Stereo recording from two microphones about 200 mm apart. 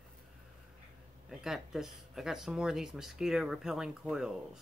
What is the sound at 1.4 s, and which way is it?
Speech, centre (ahead or behind).